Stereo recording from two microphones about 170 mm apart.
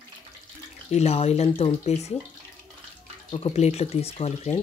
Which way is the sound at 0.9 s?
40° left (ahead or behind).